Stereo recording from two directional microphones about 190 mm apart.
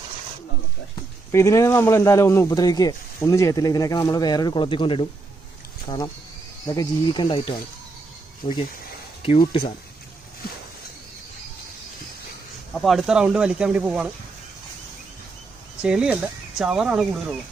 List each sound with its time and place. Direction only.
1.3 s speech: 15° left (ahead or behind)
6.7 s speech: 20° left (ahead or behind)
8.4 s speech: 20° left (ahead or behind)
12.7 s speech: centre (ahead or behind)
15.8 s speech: 5° right (ahead or behind)